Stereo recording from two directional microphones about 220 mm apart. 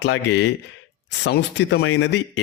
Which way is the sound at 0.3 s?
50° left (ahead or behind).